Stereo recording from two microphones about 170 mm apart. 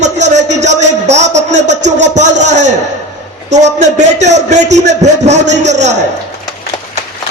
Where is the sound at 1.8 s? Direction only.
90° right.